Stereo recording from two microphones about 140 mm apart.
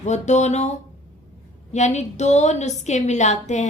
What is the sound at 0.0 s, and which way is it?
A woman's voice, 55° left (ahead or behind).